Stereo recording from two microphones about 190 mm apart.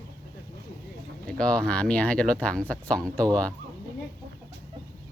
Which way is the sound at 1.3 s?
5° left (ahead or behind).